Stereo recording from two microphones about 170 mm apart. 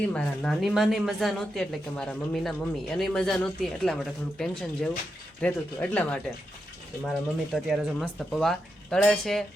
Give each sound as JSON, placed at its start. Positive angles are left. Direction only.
{"t": 0.1, "sound": "speech", "side_deg": 0}
{"t": 7.5, "sound": "speech", "side_deg": 0}